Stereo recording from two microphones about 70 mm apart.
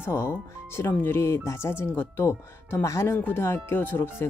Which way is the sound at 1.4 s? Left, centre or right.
Left.